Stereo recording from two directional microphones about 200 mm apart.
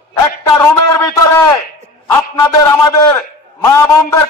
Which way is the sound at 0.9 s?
15° left (ahead or behind).